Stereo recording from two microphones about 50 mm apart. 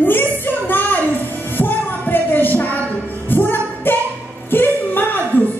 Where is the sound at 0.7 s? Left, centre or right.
Left.